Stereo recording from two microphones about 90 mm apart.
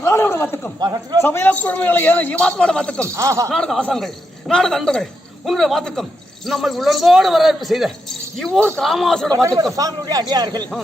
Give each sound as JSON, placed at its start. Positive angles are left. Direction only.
{"t": 0.0, "sound": "a sound", "side_deg": 30}
{"t": 0.8, "sound": "a man's voice", "side_deg": -50}
{"t": 1.2, "sound": "a man's voice", "side_deg": 25}
{"t": 3.2, "sound": "speech", "side_deg": -35}
{"t": 3.5, "sound": "speech", "side_deg": 5}
{"t": 9.3, "sound": "a man's voice", "side_deg": -40}